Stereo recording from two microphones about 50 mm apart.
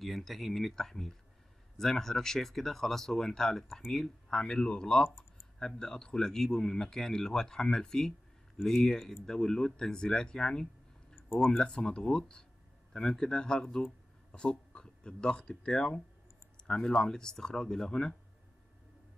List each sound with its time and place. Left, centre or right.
0.0 s speech: centre